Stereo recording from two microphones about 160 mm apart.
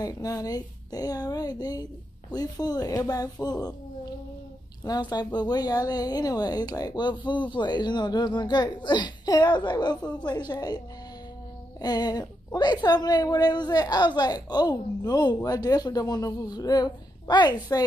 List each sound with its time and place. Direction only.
0.0 s a woman's voice: 20° left (ahead or behind)
11.8 s a woman's voice: 25° left (ahead or behind)